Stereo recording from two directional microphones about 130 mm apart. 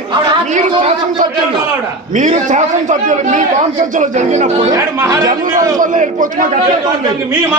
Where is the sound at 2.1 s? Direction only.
70° right (ahead or behind).